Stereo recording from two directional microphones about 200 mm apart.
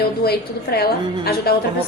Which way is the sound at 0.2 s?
50° left (ahead or behind).